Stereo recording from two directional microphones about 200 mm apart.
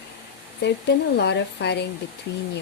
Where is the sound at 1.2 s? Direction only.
55° left (ahead or behind).